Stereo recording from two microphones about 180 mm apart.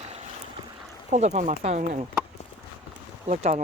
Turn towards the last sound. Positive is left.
turn(degrees=-40)  # may be behind; listen again after turning